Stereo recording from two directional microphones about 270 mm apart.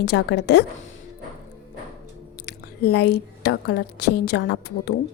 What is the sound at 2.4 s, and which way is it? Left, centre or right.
A woman's voice, left.